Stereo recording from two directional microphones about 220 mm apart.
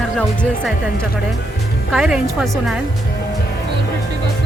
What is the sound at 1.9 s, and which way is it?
Speech, centre (ahead or behind).